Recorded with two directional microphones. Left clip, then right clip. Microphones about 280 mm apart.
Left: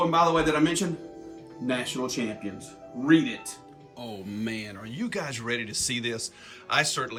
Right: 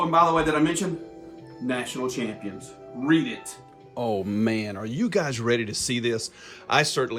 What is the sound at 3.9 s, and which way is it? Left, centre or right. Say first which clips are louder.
Speech: right 12 dB; right.